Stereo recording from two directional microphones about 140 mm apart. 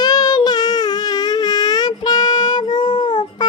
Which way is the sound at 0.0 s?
30° left (ahead or behind).